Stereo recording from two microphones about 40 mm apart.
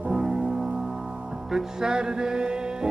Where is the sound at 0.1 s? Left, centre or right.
Centre.